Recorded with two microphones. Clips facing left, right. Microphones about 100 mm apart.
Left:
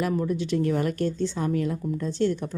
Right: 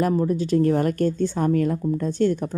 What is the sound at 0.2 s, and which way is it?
A woman's voice, 40° right (ahead or behind).